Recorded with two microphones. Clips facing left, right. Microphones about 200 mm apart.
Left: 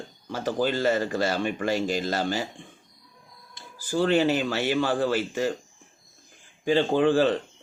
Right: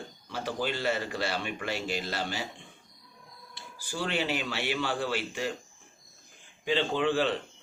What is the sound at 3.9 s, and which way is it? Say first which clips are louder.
A man's voice: left 9 dB; 50° left (ahead or behind).